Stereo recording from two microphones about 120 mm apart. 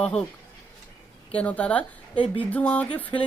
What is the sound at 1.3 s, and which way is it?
Speech, 10° left (ahead or behind).